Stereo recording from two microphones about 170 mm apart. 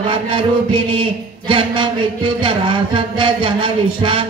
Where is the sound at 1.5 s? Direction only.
30° right (ahead or behind).